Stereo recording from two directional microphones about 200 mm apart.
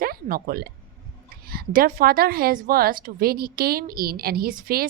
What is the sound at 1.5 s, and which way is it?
Speech, 50° right (ahead or behind).